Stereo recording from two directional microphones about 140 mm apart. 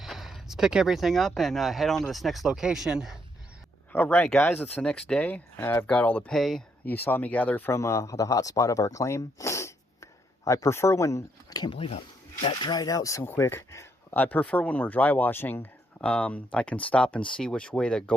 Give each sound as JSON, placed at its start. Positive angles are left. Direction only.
{"t": 0.0, "sound": "speech", "side_deg": 0}
{"t": 3.9, "sound": "speech", "side_deg": 15}
{"t": 6.9, "sound": "speech", "side_deg": 15}
{"t": 12.6, "sound": "speech", "side_deg": 30}